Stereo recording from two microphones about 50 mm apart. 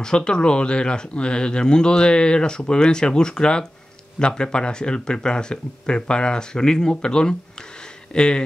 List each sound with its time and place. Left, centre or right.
0.0 s speech: centre